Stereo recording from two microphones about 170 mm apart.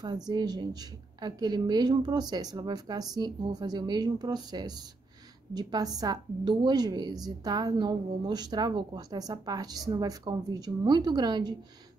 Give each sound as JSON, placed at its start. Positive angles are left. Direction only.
{"t": 0.3, "sound": "a woman's voice", "side_deg": -25}